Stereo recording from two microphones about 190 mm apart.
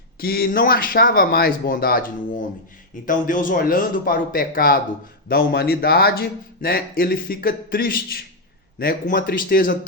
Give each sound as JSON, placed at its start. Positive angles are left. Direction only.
{"t": 0.2, "sound": "speech", "side_deg": 50}